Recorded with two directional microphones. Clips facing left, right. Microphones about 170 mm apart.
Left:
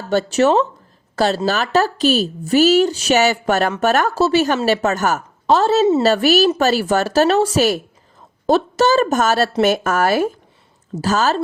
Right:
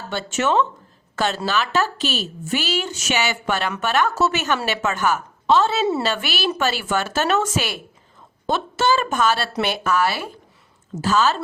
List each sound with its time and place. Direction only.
0.1 s a woman's voice: 40° left (ahead or behind)